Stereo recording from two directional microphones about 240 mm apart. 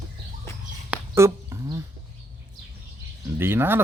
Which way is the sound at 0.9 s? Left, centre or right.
Centre.